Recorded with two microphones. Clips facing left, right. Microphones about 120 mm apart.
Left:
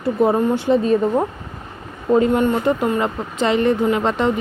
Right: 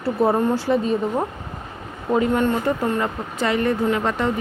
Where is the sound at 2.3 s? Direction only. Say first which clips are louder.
Left 3 dB; 20° left (ahead or behind).